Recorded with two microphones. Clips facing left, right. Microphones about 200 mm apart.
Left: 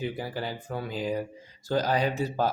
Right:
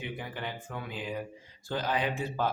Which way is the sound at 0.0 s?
35° left (ahead or behind).